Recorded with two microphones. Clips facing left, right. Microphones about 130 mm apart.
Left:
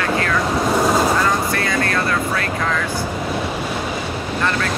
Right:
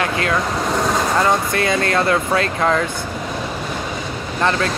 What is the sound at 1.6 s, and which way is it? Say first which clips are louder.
Speech: right 2 dB; 25° right (ahead or behind).